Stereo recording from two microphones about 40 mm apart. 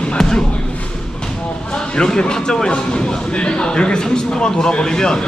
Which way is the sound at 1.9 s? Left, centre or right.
Centre.